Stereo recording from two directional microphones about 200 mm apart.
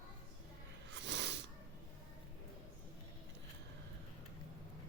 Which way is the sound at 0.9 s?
65° right (ahead or behind).